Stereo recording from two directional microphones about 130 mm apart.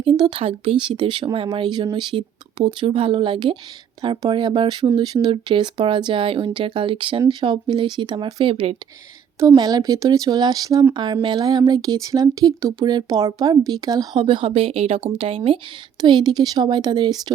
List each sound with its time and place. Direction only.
0.0 s speech: 35° right (ahead or behind)
9.6 s speech: 30° right (ahead or behind)